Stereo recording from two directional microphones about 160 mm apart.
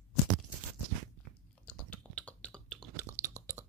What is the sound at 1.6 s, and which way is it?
Chewing, 5° left (ahead or behind).